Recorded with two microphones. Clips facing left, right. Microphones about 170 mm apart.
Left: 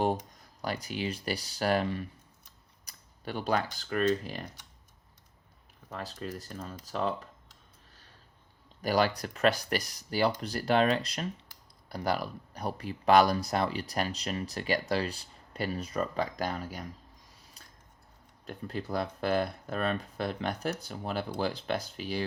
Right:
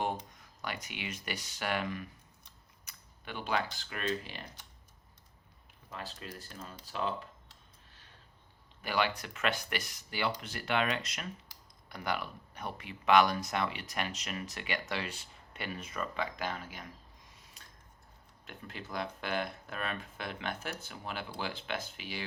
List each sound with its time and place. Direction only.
0.0 s speech: 35° left (ahead or behind)
5.9 s speech: 40° left (ahead or behind)
8.8 s speech: 40° left (ahead or behind)
17.6 s a sound: 35° left (ahead or behind)
18.4 s speech: 40° left (ahead or behind)